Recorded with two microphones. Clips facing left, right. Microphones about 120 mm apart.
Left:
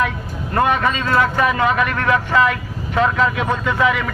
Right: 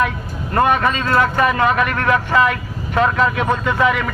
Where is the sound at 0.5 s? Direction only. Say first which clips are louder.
Right 1 dB; 50° right (ahead or behind).